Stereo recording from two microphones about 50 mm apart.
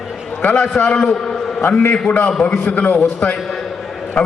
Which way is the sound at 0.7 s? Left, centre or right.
Centre.